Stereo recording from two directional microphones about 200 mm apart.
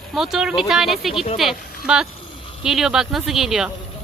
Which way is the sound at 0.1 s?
Centre (ahead or behind).